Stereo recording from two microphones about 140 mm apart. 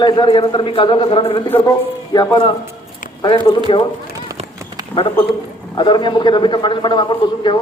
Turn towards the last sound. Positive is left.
turn(degrees=35)  # may be behind; listen again after turning